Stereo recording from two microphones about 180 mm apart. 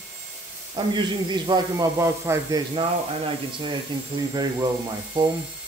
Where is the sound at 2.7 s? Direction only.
30° right (ahead or behind).